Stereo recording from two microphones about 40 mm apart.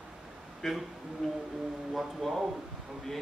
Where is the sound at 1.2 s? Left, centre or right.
Centre.